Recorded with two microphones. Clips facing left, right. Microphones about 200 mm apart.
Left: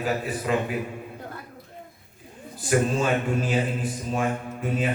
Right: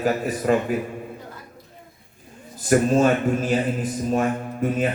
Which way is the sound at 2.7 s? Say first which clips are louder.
Right 5 dB; 45° right (ahead or behind).